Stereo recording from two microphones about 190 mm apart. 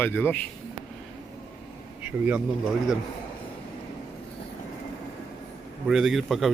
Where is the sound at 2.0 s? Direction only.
10° right (ahead or behind).